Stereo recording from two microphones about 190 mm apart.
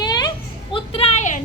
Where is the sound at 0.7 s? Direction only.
30° left (ahead or behind).